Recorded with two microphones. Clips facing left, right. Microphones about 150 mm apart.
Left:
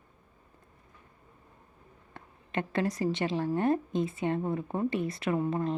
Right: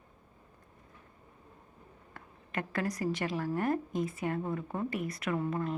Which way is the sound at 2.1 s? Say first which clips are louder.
Left 4 dB; 25° left (ahead or behind).